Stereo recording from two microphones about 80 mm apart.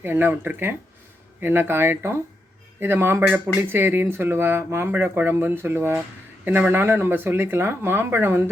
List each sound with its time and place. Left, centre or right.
0.0 s speech: right